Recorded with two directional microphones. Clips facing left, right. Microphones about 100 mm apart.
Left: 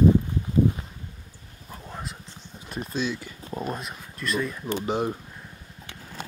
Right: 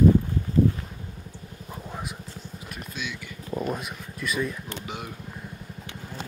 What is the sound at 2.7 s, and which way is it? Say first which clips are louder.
Speech: left 8 dB; 30° left (ahead or behind).